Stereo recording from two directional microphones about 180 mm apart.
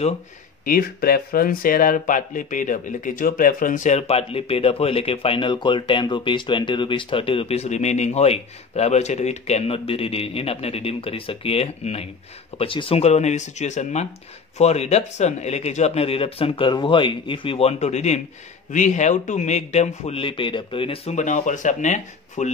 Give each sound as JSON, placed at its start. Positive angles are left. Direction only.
{"t": 0.7, "sound": "speech", "side_deg": 55}